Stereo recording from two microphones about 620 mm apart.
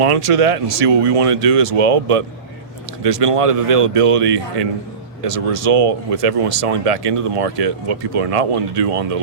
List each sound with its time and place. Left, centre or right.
0.0 s speech: right
3.1 s speech: right
5.2 s speech: right